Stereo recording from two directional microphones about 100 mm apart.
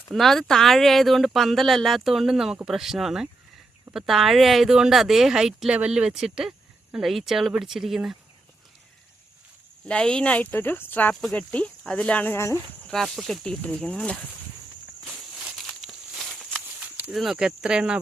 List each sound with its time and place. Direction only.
0.1 s speech: centre (ahead or behind)
9.8 s speech: 10° left (ahead or behind)
11.1 s speech: 5° left (ahead or behind)
11.3 s speech: 15° left (ahead or behind)
12.9 s speech: 5° left (ahead or behind)
15.0 s walk: centre (ahead or behind)
15.5 s a sound: centre (ahead or behind)
17.1 s speech: centre (ahead or behind)